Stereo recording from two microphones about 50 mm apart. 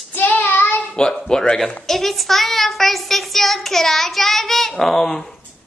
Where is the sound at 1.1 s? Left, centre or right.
Centre.